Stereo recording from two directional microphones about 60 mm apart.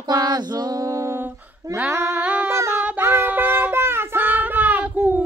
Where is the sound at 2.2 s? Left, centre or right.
Right.